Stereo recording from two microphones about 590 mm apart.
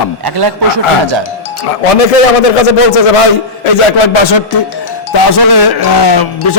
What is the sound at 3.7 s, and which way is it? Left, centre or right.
Speech, left.